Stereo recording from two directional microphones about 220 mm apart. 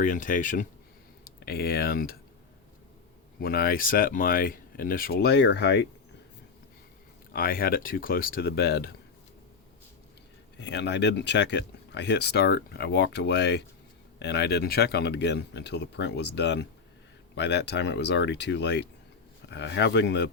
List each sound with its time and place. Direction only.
0.0 s speech: 35° left (ahead or behind)
3.4 s speech: 45° left (ahead or behind)
7.3 s speech: 40° left (ahead or behind)
10.6 s speech: 50° left (ahead or behind)